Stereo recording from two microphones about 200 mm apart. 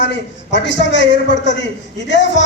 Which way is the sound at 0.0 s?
60° left (ahead or behind).